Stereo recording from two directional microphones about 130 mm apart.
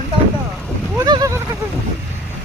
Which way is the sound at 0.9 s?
30° right (ahead or behind).